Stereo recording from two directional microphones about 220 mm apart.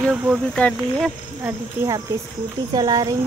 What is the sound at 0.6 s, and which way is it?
Speech, 5° left (ahead or behind).